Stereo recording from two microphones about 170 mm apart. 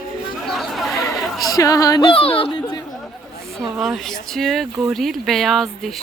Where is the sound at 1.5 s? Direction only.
20° left (ahead or behind).